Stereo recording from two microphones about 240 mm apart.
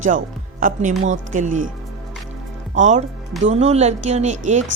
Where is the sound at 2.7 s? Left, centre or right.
Right.